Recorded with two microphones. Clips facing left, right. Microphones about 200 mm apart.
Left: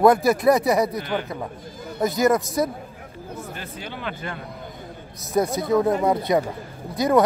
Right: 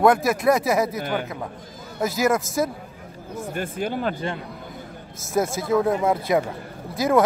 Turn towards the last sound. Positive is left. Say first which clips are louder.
# left 1 dB
turn(degrees=0)  # may be behind; listen again after turning